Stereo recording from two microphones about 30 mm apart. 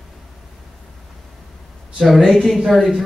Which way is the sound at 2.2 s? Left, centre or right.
Centre.